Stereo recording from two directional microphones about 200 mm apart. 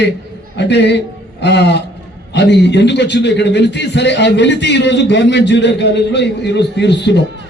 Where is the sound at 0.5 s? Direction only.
60° left (ahead or behind).